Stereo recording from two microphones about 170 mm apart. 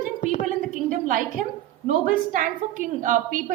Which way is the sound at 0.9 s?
50° right (ahead or behind).